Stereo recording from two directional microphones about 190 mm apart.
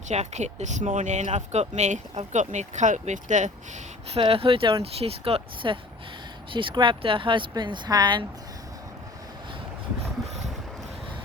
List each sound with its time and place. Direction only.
0.1 s speech: 35° right (ahead or behind)
4.1 s speech: 30° right (ahead or behind)